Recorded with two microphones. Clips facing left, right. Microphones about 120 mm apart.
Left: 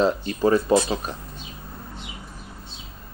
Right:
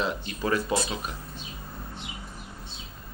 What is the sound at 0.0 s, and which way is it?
Speech, 35° left (ahead or behind).